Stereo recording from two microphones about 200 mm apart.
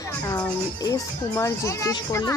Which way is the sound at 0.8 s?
15° left (ahead or behind).